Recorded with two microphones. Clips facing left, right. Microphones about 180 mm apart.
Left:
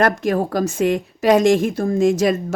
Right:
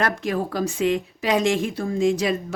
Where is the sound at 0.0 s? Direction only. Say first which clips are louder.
Left 6 dB; 45° left (ahead or behind).